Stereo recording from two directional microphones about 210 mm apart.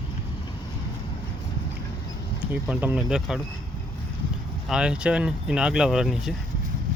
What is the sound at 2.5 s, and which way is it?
Speech, 5° right (ahead or behind).